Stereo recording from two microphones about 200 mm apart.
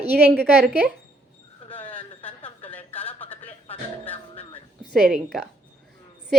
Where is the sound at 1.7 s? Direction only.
10° left (ahead or behind).